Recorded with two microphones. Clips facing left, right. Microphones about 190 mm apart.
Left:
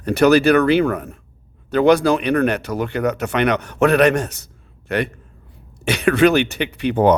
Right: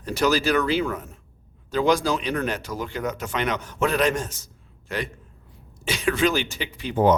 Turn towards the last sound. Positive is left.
turn(degrees=65)  # may be behind; listen again after turning